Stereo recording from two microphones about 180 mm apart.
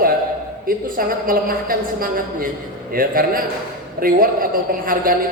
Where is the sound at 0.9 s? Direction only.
50° right (ahead or behind).